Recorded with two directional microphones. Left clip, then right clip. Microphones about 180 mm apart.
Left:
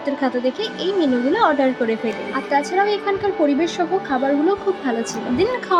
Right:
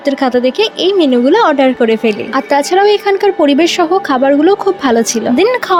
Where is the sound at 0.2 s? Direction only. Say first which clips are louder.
Right 11 dB; 40° right (ahead or behind).